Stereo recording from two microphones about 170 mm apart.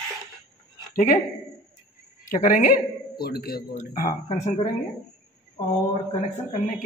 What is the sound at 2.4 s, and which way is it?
A man's voice, 50° left (ahead or behind).